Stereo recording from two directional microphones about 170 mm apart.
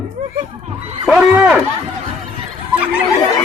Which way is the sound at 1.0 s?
Centre (ahead or behind).